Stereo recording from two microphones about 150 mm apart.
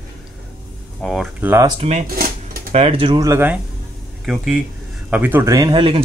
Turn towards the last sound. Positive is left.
turn(degrees=-35)  # may be behind; listen again after turning